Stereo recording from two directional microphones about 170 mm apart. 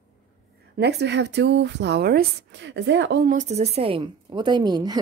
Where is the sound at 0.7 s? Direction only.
80° right.